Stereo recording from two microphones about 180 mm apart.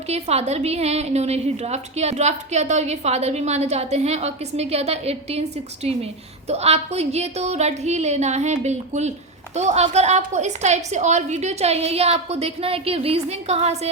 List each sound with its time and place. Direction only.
0.1 s a woman's voice: 35° right (ahead or behind)